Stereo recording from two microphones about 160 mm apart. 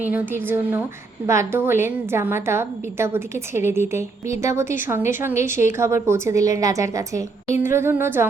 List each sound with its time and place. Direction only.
0.0 s a woman's voice: 10° right (ahead or behind)